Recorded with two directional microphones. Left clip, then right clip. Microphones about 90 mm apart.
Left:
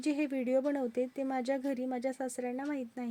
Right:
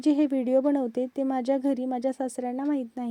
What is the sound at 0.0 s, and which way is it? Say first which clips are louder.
Speech: right 9 dB; 40° right (ahead or behind).